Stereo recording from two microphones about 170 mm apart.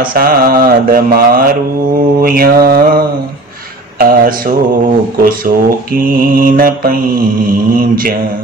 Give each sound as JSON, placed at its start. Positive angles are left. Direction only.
{"t": 0.1, "sound": "speech", "side_deg": -60}
{"t": 4.0, "sound": "speech", "side_deg": -55}
{"t": 5.9, "sound": "speech", "side_deg": -55}